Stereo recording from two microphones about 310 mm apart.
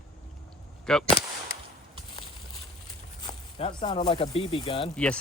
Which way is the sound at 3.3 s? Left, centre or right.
Centre.